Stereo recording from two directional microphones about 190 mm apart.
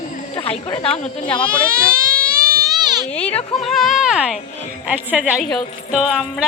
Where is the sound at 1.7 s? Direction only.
15° right (ahead or behind).